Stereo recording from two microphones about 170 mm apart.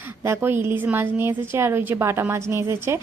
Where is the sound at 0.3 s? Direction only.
15° right (ahead or behind).